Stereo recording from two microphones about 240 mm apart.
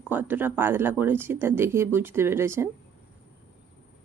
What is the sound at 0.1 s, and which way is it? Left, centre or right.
A woman's voice, centre.